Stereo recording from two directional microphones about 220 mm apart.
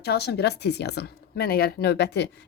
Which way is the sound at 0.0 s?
45° left (ahead or behind).